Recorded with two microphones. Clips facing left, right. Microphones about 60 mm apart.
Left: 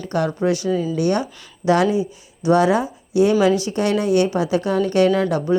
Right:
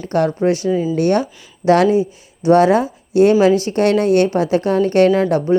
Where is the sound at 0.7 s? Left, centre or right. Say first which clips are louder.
Right 3 dB; right.